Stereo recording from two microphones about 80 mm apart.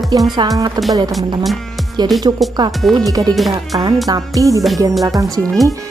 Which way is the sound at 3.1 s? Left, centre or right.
Right.